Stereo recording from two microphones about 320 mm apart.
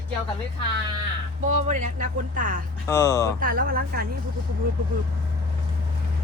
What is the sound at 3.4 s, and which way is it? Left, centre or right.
Speech, right.